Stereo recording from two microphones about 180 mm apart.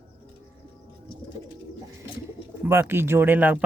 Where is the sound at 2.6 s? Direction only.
10° right (ahead or behind).